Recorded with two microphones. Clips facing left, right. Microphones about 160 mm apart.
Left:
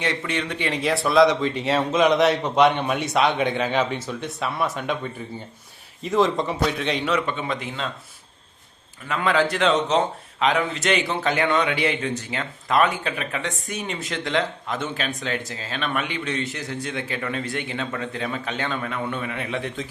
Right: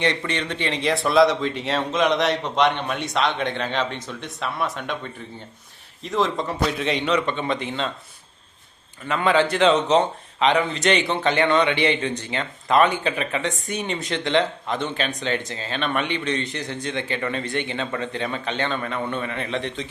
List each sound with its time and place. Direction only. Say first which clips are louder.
0.0 s a man's voice: right 2 dB; 5° left (ahead or behind)
9.0 s a man's voice: right 2 dB; centre (ahead or behind)